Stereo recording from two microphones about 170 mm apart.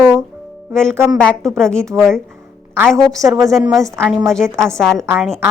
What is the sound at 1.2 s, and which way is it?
A woman's voice, 5° left (ahead or behind).